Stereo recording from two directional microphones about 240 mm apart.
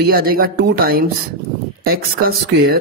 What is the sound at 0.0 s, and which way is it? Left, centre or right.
Speech, right.